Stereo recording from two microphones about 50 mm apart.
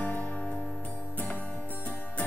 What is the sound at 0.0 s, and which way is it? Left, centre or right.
Music, left.